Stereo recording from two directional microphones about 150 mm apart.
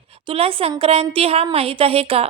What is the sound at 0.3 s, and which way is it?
A woman's voice, 40° right (ahead or behind).